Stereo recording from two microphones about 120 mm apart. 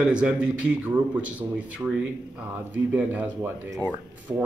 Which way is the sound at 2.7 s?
15° right (ahead or behind).